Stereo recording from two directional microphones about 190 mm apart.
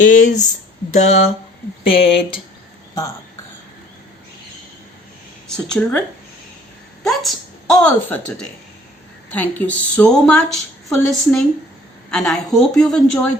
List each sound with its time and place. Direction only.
0.0 s speech: 45° left (ahead or behind)
5.6 s a woman's voice: 5° left (ahead or behind)
7.0 s a woman's voice: centre (ahead or behind)
9.3 s a woman's voice: 10° left (ahead or behind)